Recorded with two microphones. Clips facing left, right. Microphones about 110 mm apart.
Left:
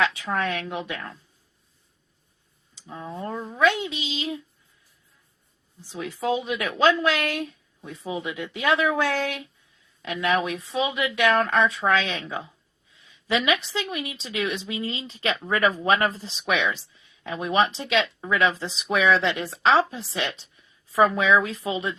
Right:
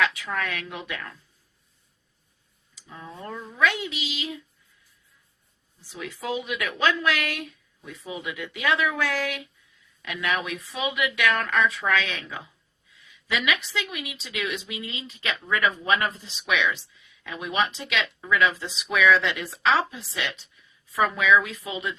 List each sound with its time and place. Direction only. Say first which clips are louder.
0.0 s speech: left 2 dB; 30° left (ahead or behind)
2.7 s speech: left 6 dB; 30° left (ahead or behind)
5.9 s a woman's voice: left 5 dB; 30° left (ahead or behind)